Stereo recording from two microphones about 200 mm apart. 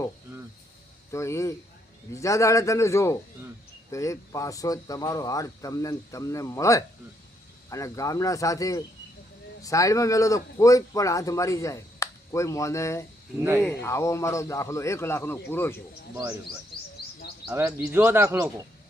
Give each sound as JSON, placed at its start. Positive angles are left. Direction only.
{"t": 1.1, "sound": "speech", "side_deg": 15}
{"t": 17.0, "sound": "bird", "side_deg": 50}
{"t": 17.5, "sound": "speech", "side_deg": -10}